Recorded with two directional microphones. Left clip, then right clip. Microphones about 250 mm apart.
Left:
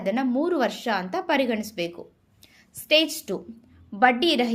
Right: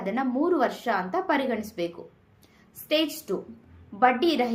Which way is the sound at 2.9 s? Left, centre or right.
Left.